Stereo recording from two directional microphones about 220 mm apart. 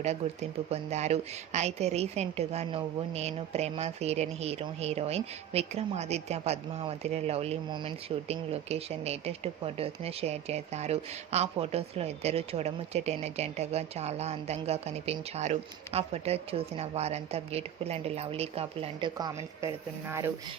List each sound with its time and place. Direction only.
0.7 s a woman's voice: 30° right (ahead or behind); by 20.3 s 10° right (ahead or behind)